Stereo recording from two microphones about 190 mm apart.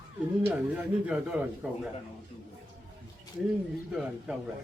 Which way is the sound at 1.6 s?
5° right (ahead or behind).